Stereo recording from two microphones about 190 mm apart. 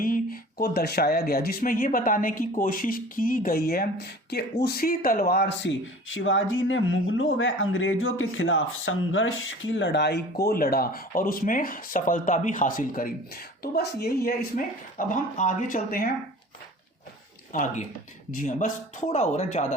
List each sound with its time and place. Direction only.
0.0 s speech: 50° left (ahead or behind)
6.1 s a woman's voice: 90° left; by 14.3 s 55° left (ahead or behind)
14.5 s speech: 40° left (ahead or behind)
17.5 s speech: 40° left (ahead or behind)